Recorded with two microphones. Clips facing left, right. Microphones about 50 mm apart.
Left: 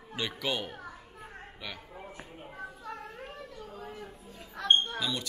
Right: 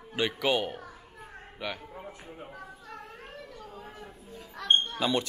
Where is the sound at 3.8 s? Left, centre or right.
Right.